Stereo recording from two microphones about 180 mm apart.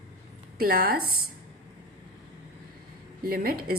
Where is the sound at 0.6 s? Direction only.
55° right (ahead or behind).